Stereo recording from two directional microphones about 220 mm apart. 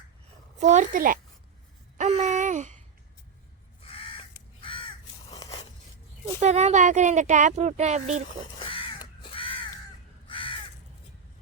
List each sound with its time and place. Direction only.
0.6 s speech: 35° right (ahead or behind)
2.0 s a sound: 30° right (ahead or behind)
3.8 s crow: 25° left (ahead or behind)
6.4 s speech: 30° right (ahead or behind)
8.5 s crow: 25° left (ahead or behind)